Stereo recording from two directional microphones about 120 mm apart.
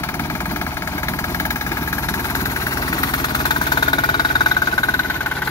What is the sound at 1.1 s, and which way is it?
Vehicle, 20° left (ahead or behind).